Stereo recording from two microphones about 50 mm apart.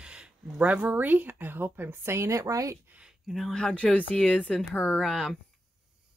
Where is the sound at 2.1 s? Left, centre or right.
Right.